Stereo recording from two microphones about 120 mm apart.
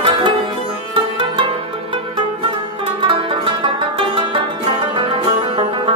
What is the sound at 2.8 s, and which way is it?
Music, 45° right (ahead or behind).